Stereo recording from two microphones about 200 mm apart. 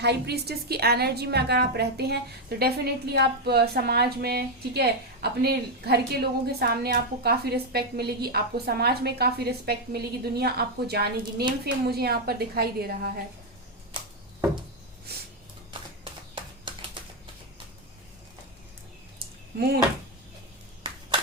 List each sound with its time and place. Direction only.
0.0 s a woman's voice: 55° right (ahead or behind)
16.3 s a sound: 25° right (ahead or behind)
19.5 s a woman's voice: 50° right (ahead or behind)